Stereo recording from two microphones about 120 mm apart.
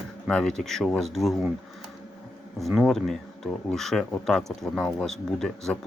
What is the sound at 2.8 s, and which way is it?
Speech, 5° left (ahead or behind).